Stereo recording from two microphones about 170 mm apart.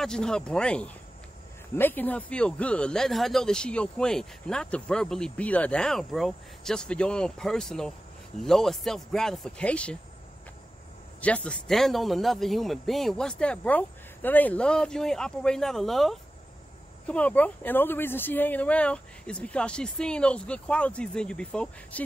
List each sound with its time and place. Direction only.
0.0 s speech: 5° left (ahead or behind)
11.1 s speech: 10° left (ahead or behind)